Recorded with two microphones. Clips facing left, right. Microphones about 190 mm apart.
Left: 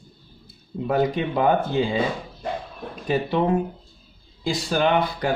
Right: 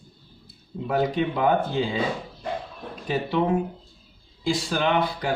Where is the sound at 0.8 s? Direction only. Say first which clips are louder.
Left 2 dB; 45° left (ahead or behind).